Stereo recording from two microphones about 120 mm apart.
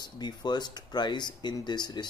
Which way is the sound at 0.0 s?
35° left (ahead or behind).